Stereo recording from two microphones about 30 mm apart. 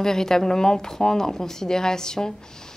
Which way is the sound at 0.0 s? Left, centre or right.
Centre.